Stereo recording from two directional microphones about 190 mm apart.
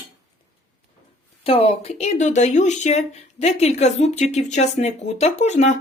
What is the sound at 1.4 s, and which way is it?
Speech, 30° left (ahead or behind).